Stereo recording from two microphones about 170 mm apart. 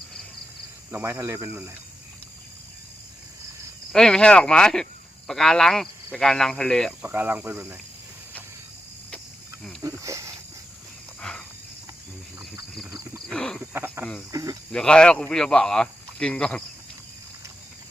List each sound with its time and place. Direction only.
0.9 s speech: 10° right (ahead or behind)
3.9 s speech: 5° left (ahead or behind)
7.0 s speech: 10° right (ahead or behind)
9.8 s speech: 20° right (ahead or behind)
11.2 s a sound: 5° left (ahead or behind)
12.9 s wild animals: 20° right (ahead or behind)
13.2 s wild animals: 5° left (ahead or behind)
13.6 s snake: 15° right (ahead or behind)
14.0 s speech: 5° left (ahead or behind)
14.3 s speech: 20° right (ahead or behind)
14.7 s speech: 5° left (ahead or behind)